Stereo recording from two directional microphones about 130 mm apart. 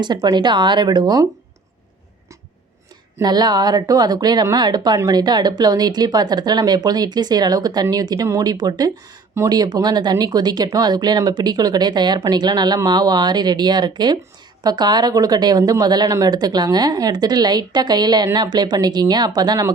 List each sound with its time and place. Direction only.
0.0 s a woman's voice: 35° right (ahead or behind)
3.2 s a woman's voice: 30° right (ahead or behind)